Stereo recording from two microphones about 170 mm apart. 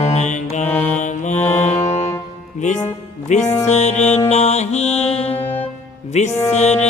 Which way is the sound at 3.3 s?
45° left (ahead or behind).